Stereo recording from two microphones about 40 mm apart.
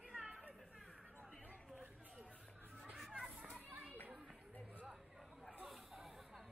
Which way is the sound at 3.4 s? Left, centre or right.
Right.